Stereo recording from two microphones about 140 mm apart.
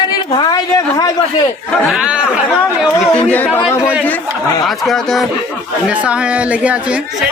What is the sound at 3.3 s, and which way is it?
Speech, 15° left (ahead or behind).